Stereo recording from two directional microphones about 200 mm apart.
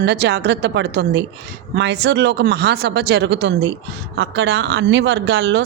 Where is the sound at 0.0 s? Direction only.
55° right (ahead or behind).